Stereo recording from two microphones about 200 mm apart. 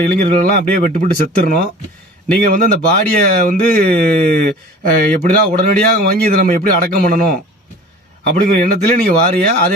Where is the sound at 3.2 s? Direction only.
45° right (ahead or behind).